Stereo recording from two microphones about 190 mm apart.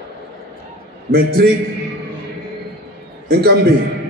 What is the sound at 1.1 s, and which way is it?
Speech, 55° right (ahead or behind).